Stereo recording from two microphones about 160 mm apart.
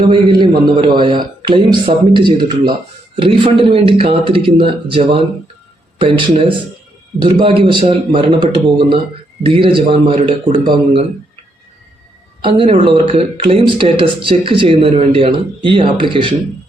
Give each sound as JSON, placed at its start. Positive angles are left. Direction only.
{"t": 0.0, "sound": "a man's voice", "side_deg": -30}
{"t": 12.4, "sound": "speech", "side_deg": -30}